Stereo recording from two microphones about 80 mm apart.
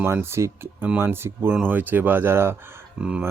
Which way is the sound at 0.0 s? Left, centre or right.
Right.